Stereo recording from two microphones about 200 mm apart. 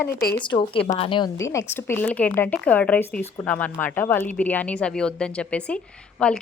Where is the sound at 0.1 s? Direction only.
50° left (ahead or behind).